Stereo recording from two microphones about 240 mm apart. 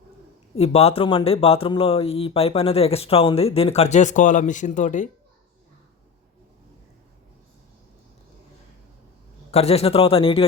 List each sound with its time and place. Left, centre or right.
0.5 s speech: left
9.5 s speech: left